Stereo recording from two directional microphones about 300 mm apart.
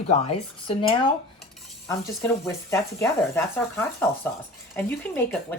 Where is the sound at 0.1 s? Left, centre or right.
Centre.